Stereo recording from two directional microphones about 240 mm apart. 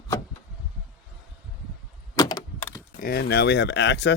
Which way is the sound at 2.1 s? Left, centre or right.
Centre.